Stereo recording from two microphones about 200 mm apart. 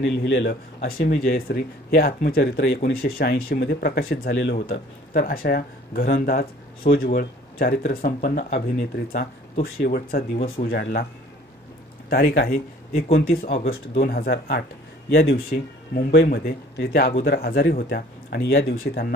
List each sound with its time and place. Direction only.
0.0 s a man's voice: 65° left (ahead or behind)
0.8 s speech: 50° left (ahead or behind)
12.1 s speech: 50° left (ahead or behind)